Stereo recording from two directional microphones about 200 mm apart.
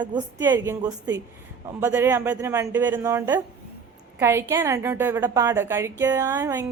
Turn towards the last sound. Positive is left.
turn(degrees=-10)  # may be behind; listen again after turning